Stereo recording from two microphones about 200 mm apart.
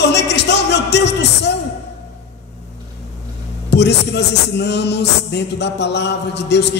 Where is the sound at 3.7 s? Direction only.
60° left (ahead or behind).